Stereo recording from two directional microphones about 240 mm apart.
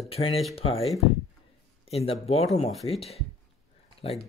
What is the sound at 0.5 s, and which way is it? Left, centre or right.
Speech, left.